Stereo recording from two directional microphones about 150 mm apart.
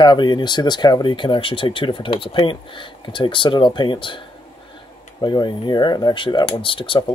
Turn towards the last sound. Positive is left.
turn(degrees=35)  # may be behind; listen again after turning